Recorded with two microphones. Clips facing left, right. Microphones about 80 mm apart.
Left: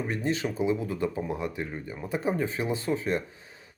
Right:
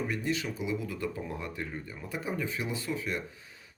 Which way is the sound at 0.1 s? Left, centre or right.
Left.